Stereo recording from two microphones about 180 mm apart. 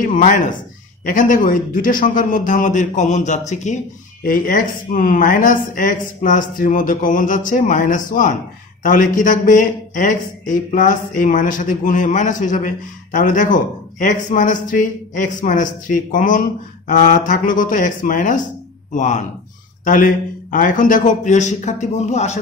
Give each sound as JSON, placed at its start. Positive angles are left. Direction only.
{"t": 0.0, "sound": "a man's voice", "side_deg": 45}